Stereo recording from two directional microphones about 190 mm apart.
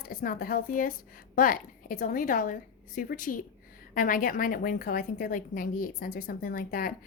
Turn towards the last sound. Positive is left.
turn(degrees=50)  # may be behind; listen again after turning